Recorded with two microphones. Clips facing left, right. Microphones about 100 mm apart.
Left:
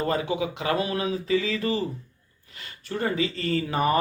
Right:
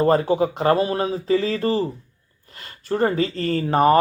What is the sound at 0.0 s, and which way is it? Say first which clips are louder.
Speech: right 8 dB; 40° right (ahead or behind).